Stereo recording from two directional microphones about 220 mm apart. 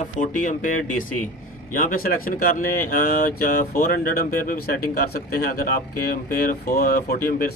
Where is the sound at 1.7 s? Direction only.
40° left (ahead or behind).